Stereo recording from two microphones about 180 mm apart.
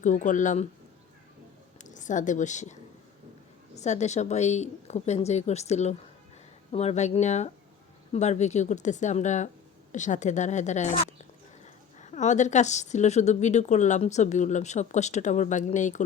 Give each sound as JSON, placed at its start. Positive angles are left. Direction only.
{"t": 0.0, "sound": "speech", "side_deg": 45}
{"t": 1.8, "sound": "a woman's voice", "side_deg": 45}
{"t": 3.8, "sound": "a woman's voice", "side_deg": 40}